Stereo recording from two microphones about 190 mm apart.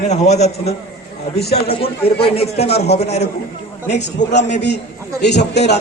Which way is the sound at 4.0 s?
65° left (ahead or behind).